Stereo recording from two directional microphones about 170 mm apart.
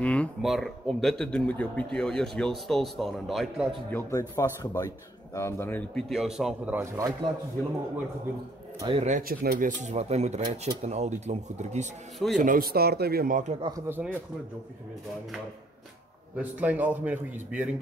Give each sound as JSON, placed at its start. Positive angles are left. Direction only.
{"t": 0.0, "sound": "speech", "side_deg": 5}
{"t": 3.9, "sound": "speech", "side_deg": 20}
{"t": 8.8, "sound": "speech", "side_deg": -40}
{"t": 9.2, "sound": "speech", "side_deg": -60}
{"t": 12.4, "sound": "speech", "side_deg": -55}
{"t": 13.6, "sound": "speech", "side_deg": -25}
{"t": 13.8, "sound": "a man's voice", "side_deg": -10}
{"t": 16.3, "sound": "a man's voice", "side_deg": -10}